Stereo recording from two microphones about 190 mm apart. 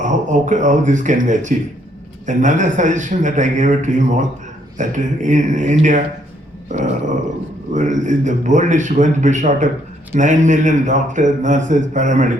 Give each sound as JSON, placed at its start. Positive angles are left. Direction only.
{"t": 0.0, "sound": "speech", "side_deg": -40}
{"t": 7.7, "sound": "speech", "side_deg": -40}